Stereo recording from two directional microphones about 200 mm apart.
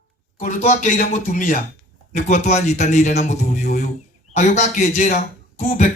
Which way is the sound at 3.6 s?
40° left (ahead or behind).